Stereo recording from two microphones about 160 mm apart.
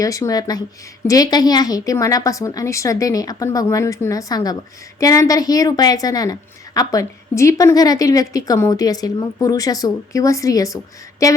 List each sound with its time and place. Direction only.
0.0 s a woman's voice: 20° left (ahead or behind)